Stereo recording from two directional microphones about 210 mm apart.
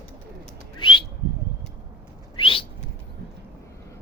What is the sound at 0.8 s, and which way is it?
Bird, 25° left (ahead or behind).